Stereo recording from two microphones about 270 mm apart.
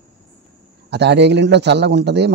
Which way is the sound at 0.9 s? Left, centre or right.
Right.